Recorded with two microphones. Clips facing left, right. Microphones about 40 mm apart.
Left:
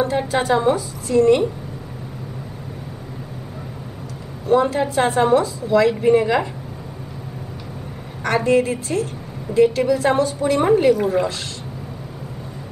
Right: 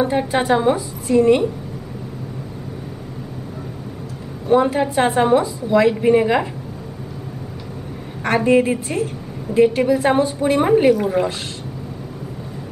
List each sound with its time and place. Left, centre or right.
0.3 s a woman's voice: centre
4.5 s a woman's voice: centre
8.5 s a woman's voice: centre
10.9 s speech: centre